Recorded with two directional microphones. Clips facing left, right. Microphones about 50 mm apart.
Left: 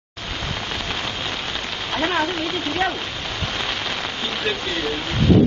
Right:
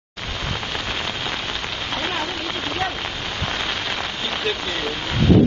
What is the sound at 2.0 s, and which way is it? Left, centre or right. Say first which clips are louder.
Rain: left 5 dB; left.